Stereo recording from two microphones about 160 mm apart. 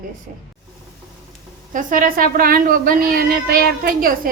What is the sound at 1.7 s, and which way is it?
A woman's voice, 55° right (ahead or behind).